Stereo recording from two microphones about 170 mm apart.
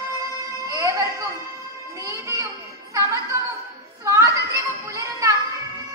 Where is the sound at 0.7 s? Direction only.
20° right (ahead or behind).